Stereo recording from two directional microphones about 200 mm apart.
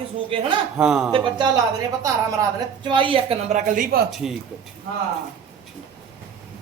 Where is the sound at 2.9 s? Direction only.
25° right (ahead or behind); by 4.0 s 40° right (ahead or behind).